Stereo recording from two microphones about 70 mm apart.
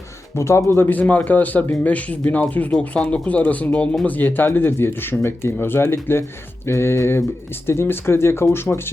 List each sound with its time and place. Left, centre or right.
0.3 s speech: left
0.9 s speech: left